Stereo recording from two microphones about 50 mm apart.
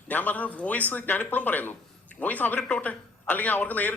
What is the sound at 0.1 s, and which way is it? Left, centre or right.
A man's voice, left.